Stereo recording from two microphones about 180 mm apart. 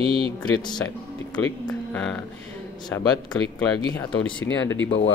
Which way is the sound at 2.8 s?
20° left (ahead or behind).